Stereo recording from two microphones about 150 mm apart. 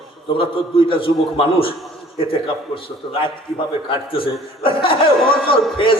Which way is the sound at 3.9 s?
35° left (ahead or behind).